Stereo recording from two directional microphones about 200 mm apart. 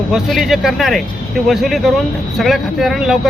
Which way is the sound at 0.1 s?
Centre (ahead or behind).